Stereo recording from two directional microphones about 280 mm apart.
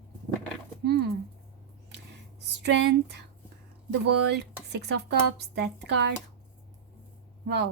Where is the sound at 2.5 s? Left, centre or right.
Right.